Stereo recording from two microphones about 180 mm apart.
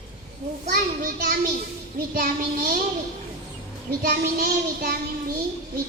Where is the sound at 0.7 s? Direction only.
55° right (ahead or behind).